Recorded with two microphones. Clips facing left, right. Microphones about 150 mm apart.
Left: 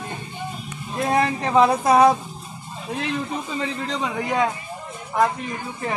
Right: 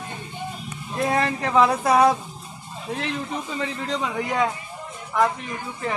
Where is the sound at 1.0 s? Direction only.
20° left (ahead or behind).